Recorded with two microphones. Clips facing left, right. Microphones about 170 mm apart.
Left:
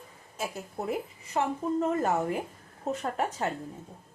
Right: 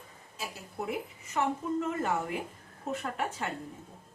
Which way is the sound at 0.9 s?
35° left (ahead or behind).